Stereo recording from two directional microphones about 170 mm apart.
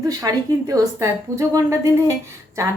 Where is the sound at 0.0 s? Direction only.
20° right (ahead or behind).